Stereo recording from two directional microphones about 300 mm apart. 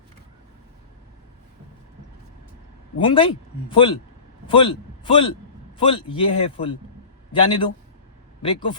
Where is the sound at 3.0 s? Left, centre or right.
Centre.